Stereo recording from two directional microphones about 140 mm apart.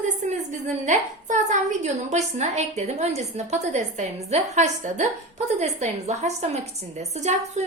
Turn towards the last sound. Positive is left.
turn(degrees=-55)  # may be behind; listen again after turning